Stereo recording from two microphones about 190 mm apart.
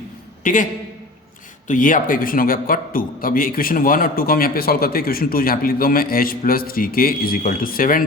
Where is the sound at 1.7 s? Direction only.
45° left (ahead or behind).